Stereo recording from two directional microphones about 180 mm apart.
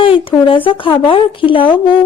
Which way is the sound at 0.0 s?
30° left (ahead or behind).